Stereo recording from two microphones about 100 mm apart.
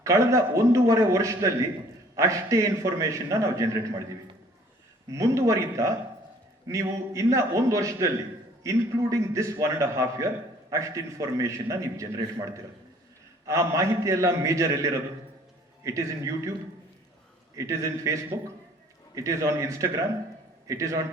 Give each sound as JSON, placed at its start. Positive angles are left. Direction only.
{"t": 0.0, "sound": "a man's voice", "side_deg": -30}
{"t": 13.5, "sound": "a man's voice", "side_deg": -30}
{"t": 17.5, "sound": "a man's voice", "side_deg": -30}